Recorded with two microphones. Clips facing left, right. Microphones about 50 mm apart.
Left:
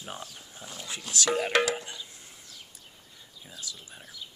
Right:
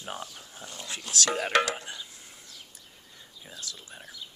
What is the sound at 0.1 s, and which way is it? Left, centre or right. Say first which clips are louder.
Speech: right 4 dB; centre.